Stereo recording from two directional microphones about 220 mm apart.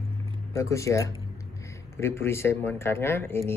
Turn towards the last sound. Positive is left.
turn(degrees=10)  # may be behind; listen again after turning